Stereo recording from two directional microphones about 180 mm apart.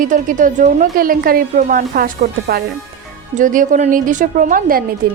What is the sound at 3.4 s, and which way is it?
A woman's voice, 45° right (ahead or behind).